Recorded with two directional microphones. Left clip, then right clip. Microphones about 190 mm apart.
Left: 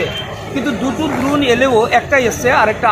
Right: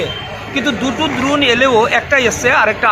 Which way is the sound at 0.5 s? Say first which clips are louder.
Right 2 dB; centre (ahead or behind).